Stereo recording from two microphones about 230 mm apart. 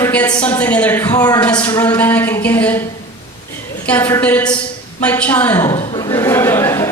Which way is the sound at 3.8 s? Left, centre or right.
Centre.